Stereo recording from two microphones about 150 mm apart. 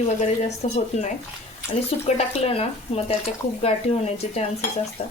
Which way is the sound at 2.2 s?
45° left (ahead or behind).